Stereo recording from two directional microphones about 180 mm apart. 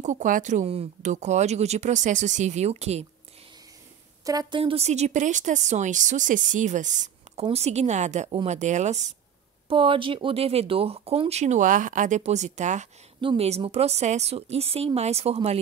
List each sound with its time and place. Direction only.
0.0 s speech: 45° right (ahead or behind)
4.2 s a woman's voice: 20° right (ahead or behind); by 9.1 s 40° right (ahead or behind)
9.7 s speech: 30° right (ahead or behind)
13.2 s speech: 30° right (ahead or behind)